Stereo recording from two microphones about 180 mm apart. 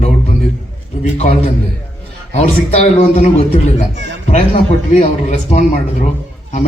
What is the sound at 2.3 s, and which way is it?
A man's voice, 40° left (ahead or behind).